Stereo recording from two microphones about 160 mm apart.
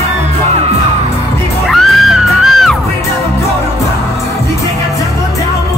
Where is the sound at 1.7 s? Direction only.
Centre (ahead or behind).